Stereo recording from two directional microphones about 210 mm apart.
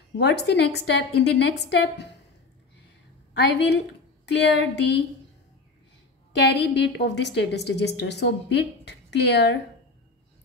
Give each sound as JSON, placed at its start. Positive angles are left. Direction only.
{"t": 0.2, "sound": "a woman's voice", "side_deg": 55}
{"t": 3.3, "sound": "speech", "side_deg": 55}
{"t": 6.3, "sound": "a woman's voice", "side_deg": 55}